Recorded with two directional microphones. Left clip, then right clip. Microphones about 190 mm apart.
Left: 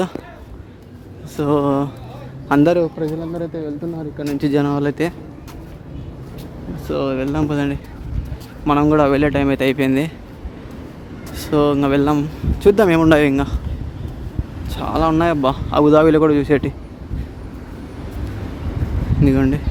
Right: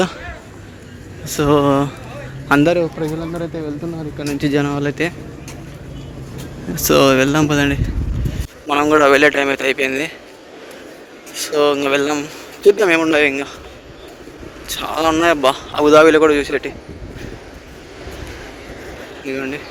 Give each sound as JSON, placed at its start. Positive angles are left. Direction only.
{"t": 1.3, "sound": "speech", "side_deg": 10}
{"t": 2.5, "sound": "speech", "side_deg": 20}
{"t": 6.8, "sound": "speech", "side_deg": -10}
{"t": 11.3, "sound": "speech", "side_deg": 15}
{"t": 14.7, "sound": "speech", "side_deg": 5}
{"t": 19.2, "sound": "speech", "side_deg": 20}